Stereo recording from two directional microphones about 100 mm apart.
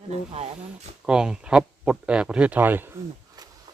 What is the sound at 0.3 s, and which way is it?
Speech, 80° right.